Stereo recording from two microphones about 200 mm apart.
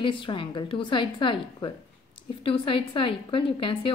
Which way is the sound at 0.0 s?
25° left (ahead or behind).